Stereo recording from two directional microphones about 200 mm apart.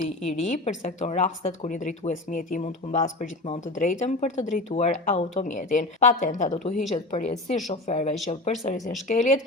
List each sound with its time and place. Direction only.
0.0 s a woman's voice: 35° left (ahead or behind)